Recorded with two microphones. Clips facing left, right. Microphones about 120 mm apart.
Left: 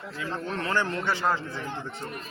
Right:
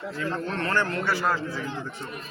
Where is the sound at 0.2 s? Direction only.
10° left (ahead or behind).